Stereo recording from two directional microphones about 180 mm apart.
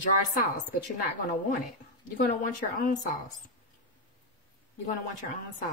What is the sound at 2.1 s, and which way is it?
A woman's voice, 50° left (ahead or behind).